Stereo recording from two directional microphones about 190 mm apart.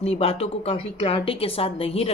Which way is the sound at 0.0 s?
30° left (ahead or behind).